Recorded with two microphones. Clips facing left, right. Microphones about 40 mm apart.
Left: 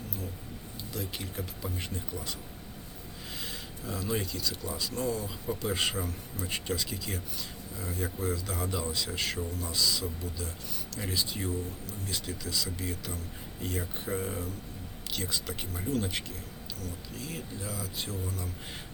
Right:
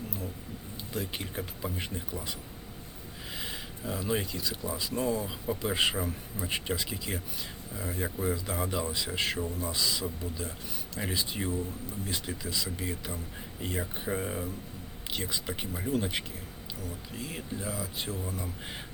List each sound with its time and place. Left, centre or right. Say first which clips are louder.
0.9 s speech: right 2 dB; right